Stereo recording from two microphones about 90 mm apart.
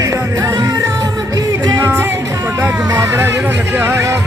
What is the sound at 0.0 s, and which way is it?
Music, 35° right (ahead or behind).